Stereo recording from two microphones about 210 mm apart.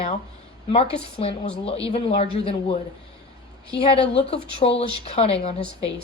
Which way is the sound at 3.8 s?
25° left (ahead or behind).